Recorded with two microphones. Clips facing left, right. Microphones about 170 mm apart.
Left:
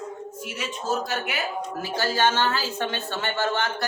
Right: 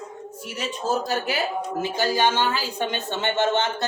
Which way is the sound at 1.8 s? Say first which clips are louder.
Right 1 dB; 15° right (ahead or behind).